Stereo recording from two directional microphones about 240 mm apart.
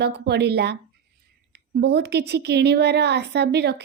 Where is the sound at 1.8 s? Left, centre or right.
Right.